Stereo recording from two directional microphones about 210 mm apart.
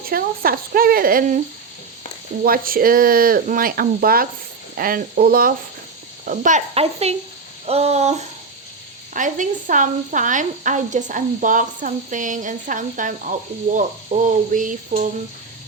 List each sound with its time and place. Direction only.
0.1 s speech: 45° right (ahead or behind)
2.4 s a woman's voice: 45° right (ahead or behind)